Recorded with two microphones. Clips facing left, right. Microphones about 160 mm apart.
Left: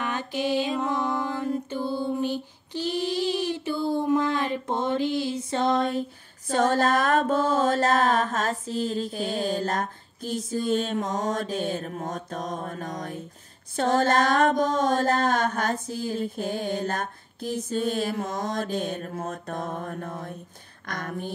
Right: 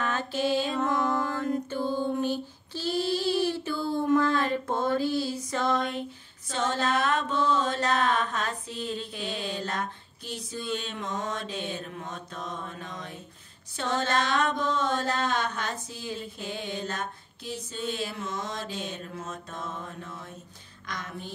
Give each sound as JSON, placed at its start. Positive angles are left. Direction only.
{"t": 0.0, "sound": "music", "side_deg": 15}
{"t": 6.5, "sound": "mantra", "side_deg": 50}